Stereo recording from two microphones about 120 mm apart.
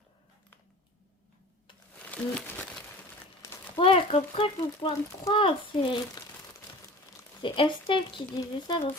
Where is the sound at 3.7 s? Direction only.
50° left (ahead or behind).